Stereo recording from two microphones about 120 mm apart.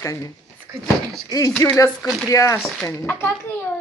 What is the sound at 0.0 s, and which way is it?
Speech, 25° left (ahead or behind).